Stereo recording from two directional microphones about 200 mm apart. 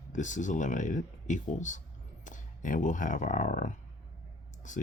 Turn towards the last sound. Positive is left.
turn(degrees=40)  # may be behind; listen again after turning